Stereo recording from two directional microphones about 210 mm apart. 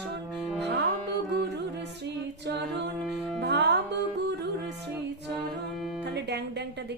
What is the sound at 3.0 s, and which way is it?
Music, centre (ahead or behind).